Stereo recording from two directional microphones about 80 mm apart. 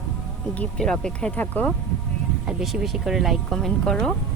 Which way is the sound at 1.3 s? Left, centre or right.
Left.